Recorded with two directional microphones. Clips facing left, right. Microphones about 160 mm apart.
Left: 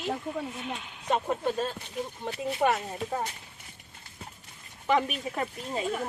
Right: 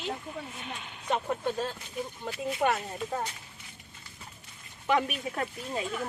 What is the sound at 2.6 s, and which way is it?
Speech, 5° left (ahead or behind).